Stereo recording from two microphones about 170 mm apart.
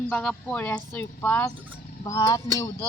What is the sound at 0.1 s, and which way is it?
A man's voice, 5° left (ahead or behind).